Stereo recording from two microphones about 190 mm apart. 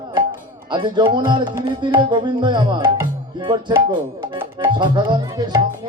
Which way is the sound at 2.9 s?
25° right (ahead or behind).